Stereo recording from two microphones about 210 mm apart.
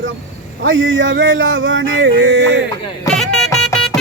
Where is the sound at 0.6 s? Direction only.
65° right (ahead or behind).